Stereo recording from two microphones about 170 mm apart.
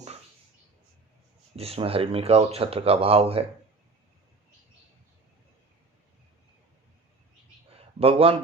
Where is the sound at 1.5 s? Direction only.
35° right (ahead or behind).